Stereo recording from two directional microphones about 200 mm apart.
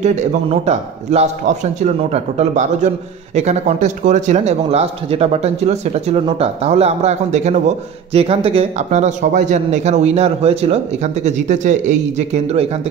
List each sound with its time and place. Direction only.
0.0 s speech: 35° right (ahead or behind)